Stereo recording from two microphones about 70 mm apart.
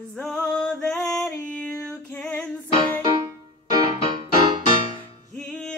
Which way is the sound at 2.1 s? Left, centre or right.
Centre.